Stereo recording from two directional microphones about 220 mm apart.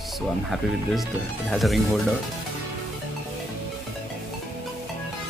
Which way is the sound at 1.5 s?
Centre (ahead or behind).